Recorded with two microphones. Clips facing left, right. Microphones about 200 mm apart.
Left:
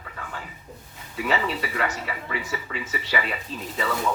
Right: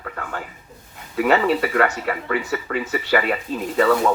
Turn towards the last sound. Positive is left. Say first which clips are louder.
# right 11 dB
turn(degrees=-65)  # may be behind; listen again after turning